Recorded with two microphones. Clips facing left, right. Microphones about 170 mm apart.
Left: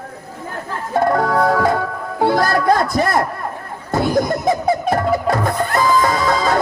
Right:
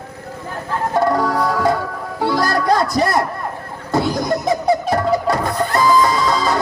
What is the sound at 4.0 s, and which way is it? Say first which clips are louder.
Music: left 1 dB; 55° left (ahead or behind).